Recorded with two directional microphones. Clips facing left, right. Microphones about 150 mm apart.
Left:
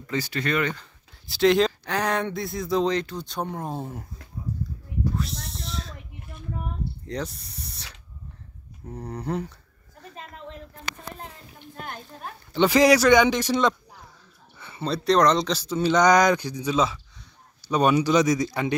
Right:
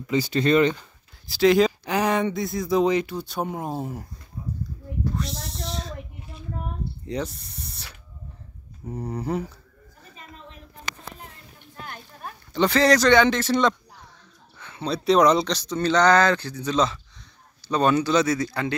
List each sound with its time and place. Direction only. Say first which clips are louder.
0.0 s speech: right 5 dB; 15° right (ahead or behind)
0.4 s speech: right 8 dB; 25° right (ahead or behind)
1.2 s speech: right 2 dB; centre (ahead or behind)
5.0 s snake: even; centre (ahead or behind)
7.1 s speech: right 4 dB; centre (ahead or behind)
12.5 s speech: left 1 dB; 10° left (ahead or behind); by 15.4 s 10° right (ahead or behind)
15.4 s speech: left 1 dB; 5° left (ahead or behind)